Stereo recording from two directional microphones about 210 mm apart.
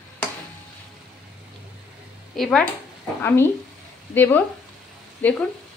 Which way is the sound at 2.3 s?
5° left (ahead or behind).